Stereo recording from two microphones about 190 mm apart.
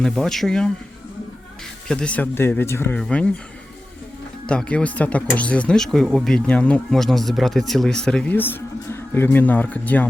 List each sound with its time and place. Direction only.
0.0 s speech: centre (ahead or behind)
1.9 s speech: 5° left (ahead or behind)
4.4 s speech: 5° left (ahead or behind)